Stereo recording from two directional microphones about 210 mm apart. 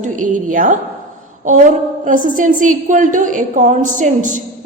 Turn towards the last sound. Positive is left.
turn(degrees=-35)  # may be behind; listen again after turning